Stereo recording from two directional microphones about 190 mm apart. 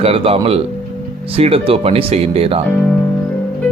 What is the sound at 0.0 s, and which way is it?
Speech, 30° right (ahead or behind).